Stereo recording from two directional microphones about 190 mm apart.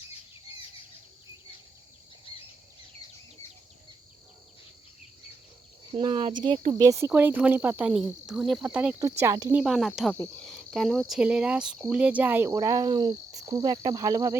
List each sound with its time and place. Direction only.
5.9 s speech: 30° right (ahead or behind)
6.7 s speech: 15° right (ahead or behind)
9.6 s speech: centre (ahead or behind)
10.2 s cricket: centre (ahead or behind)
11.1 s speech: 5° right (ahead or behind)